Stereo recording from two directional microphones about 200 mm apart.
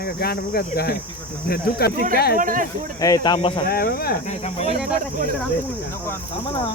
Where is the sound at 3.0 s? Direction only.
20° left (ahead or behind).